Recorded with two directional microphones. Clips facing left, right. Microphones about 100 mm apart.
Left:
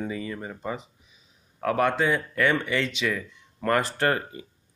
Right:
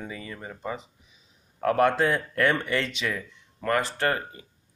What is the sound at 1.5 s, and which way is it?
Speech, centre (ahead or behind).